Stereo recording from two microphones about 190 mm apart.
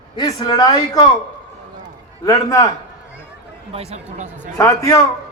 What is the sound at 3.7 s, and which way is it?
Speech, 35° right (ahead or behind).